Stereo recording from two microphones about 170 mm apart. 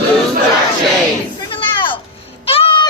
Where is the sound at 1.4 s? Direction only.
30° left (ahead or behind).